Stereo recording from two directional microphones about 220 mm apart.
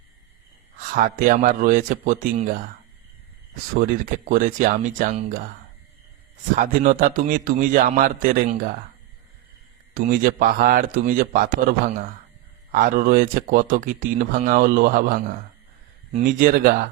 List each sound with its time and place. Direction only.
0.8 s speech: 40° right (ahead or behind)
3.8 s speech: 35° right (ahead or behind)
6.6 s speech: 35° right (ahead or behind)
9.9 s speech: 40° right (ahead or behind)
12.7 s speech: 40° right (ahead or behind)
16.2 s speech: 40° right (ahead or behind)